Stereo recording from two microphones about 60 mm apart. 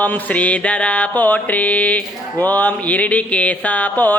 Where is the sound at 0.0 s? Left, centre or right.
Left.